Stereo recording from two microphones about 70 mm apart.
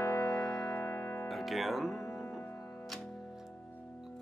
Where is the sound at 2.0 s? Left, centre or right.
Left.